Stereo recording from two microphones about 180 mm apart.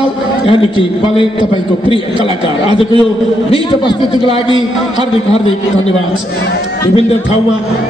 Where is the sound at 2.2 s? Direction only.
25° right (ahead or behind).